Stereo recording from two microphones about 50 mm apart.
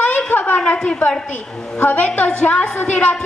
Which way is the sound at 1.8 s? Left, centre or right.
Left.